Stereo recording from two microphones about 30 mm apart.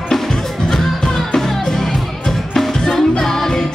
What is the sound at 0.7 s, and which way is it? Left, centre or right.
Music, centre.